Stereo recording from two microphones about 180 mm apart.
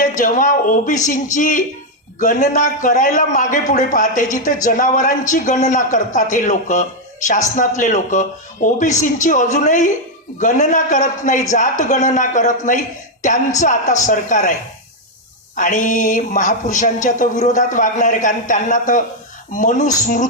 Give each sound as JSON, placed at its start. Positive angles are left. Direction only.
{"t": 0.2, "sound": "a man's voice", "side_deg": 45}
{"t": 15.5, "sound": "a man's voice", "side_deg": 45}